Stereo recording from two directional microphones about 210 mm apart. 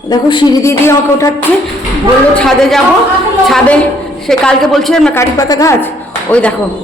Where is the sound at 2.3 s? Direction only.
Centre (ahead or behind).